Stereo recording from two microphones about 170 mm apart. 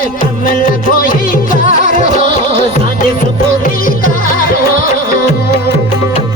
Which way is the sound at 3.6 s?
55° left (ahead or behind).